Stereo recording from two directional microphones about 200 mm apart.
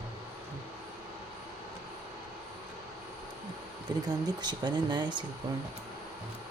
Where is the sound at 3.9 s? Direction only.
20° right (ahead or behind).